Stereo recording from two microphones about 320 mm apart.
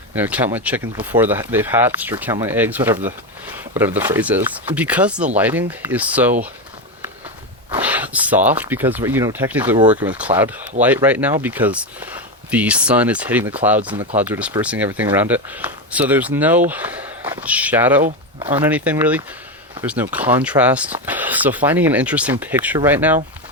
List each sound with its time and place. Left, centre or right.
0.1 s speech: centre
7.7 s a sound: centre
8.4 s speech: centre
13.9 s speech: centre
14.2 s speech: centre
18.0 s speech: centre
18.5 s speech: centre